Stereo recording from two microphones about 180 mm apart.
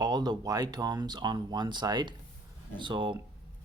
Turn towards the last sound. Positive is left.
turn(degrees=-25)  # may be behind; listen again after turning